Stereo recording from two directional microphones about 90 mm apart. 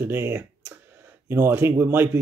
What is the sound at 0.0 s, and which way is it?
Speech, 25° right (ahead or behind).